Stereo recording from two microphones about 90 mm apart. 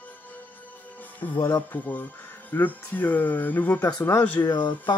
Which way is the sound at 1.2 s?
20° left (ahead or behind).